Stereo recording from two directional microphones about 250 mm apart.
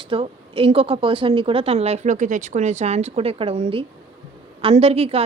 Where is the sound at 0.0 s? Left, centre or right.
Right.